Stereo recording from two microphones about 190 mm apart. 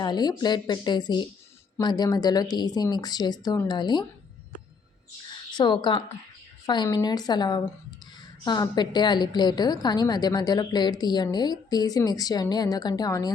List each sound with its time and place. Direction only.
0.0 s a woman's voice: 20° left (ahead or behind)
5.3 s a sound: 25° left (ahead or behind)
6.7 s a woman's voice: 20° left (ahead or behind)